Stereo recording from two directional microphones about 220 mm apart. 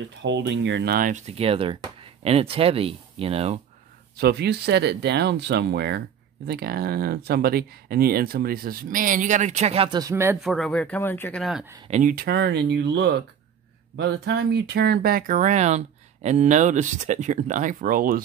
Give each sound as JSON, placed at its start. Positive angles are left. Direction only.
{"t": 0.2, "sound": "speech", "side_deg": -55}
{"t": 4.2, "sound": "speech", "side_deg": -45}
{"t": 10.4, "sound": "speech", "side_deg": 0}
{"t": 11.9, "sound": "speech", "side_deg": -35}